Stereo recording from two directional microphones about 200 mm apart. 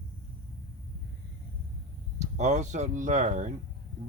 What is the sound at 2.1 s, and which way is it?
Speech, 35° right (ahead or behind).